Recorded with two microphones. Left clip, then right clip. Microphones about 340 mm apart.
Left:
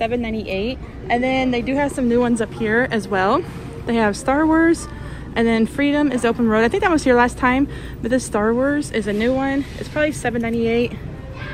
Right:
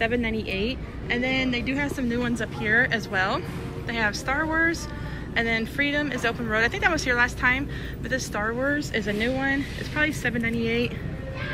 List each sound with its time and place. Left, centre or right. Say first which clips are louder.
0.0 s speech: left 3 dB; centre
8.5 s speech: left 7 dB; left
8.7 s speech: left 5 dB; centre